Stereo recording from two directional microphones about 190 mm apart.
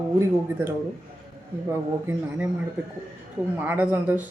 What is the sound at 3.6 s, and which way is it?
Speech, 10° right (ahead or behind).